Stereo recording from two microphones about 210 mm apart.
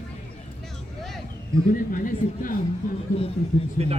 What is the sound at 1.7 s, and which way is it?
Speech, 40° left (ahead or behind).